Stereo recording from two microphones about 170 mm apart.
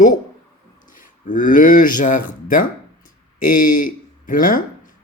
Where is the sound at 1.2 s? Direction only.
50° left (ahead or behind).